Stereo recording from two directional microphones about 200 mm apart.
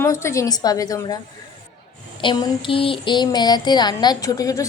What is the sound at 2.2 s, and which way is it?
Speech, 20° left (ahead or behind).